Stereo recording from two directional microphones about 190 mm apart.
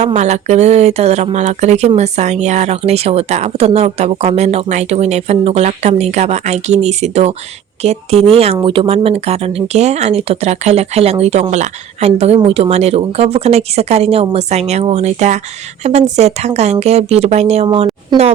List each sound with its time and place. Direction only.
0.0 s speech: 35° right (ahead or behind)